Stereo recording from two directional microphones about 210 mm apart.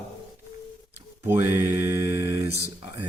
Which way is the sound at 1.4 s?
55° left (ahead or behind).